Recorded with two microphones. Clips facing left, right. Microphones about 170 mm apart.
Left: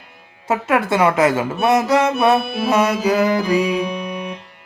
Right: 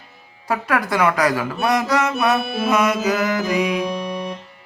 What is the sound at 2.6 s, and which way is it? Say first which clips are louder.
Mantra: left 2 dB; 30° left (ahead or behind).